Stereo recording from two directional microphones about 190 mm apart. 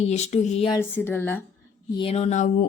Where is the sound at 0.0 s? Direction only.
35° left (ahead or behind).